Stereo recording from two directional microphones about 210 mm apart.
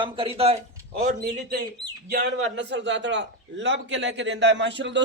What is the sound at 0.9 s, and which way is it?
A man's voice, 45° right (ahead or behind).